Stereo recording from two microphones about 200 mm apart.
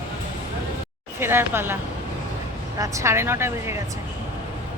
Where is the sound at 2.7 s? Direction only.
15° right (ahead or behind).